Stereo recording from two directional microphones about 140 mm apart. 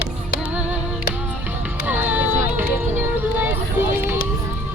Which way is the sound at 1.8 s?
10° right (ahead or behind).